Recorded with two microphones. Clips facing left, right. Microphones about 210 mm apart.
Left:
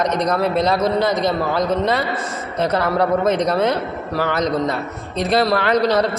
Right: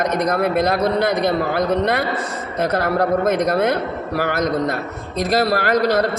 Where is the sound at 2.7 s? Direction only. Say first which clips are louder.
Even; 50° right (ahead or behind).